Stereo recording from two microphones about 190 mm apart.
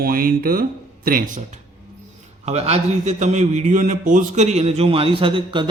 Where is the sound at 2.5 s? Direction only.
35° right (ahead or behind).